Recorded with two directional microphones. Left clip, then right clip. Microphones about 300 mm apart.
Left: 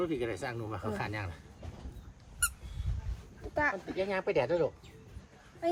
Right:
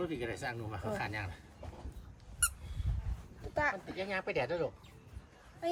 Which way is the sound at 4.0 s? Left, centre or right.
Centre.